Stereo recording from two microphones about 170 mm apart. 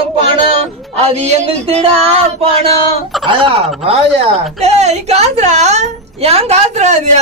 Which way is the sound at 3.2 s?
30° right (ahead or behind).